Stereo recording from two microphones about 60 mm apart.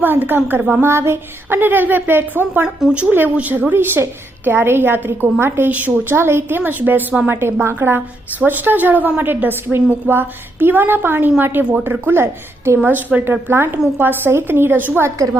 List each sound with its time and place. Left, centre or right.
0.0 s a woman's voice: right
2.9 s a woman's voice: right
5.7 s a woman's voice: right
6.1 s a woman's voice: right
6.6 s a woman's voice: right
7.3 s a woman's voice: right
12.8 s a woman's voice: right
13.5 s a woman's voice: right